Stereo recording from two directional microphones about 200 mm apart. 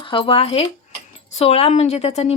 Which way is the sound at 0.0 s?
25° left (ahead or behind).